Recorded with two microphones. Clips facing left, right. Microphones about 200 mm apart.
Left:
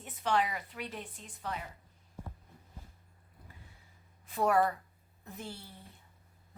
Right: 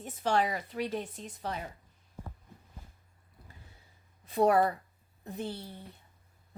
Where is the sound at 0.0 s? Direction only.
40° right (ahead or behind).